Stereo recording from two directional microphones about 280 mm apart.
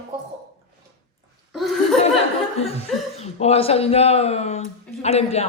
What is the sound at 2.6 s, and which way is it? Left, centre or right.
Speech, left.